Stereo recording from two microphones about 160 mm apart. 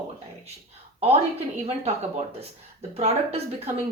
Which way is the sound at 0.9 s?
40° right (ahead or behind).